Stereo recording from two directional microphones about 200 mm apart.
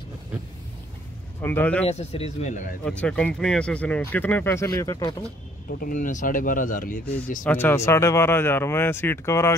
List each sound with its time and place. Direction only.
1.4 s speech: 10° left (ahead or behind)
1.9 s speech: 30° left (ahead or behind)
2.8 s speech: 5° left (ahead or behind)
5.7 s speech: 45° left (ahead or behind)
7.4 s speech: 10° left (ahead or behind)